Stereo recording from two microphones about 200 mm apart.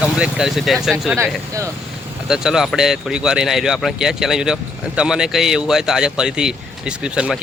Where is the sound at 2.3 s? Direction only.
Centre (ahead or behind).